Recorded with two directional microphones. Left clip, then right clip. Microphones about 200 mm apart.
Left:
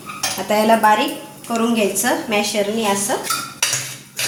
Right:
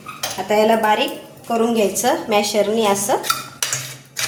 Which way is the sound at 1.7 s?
20° right (ahead or behind).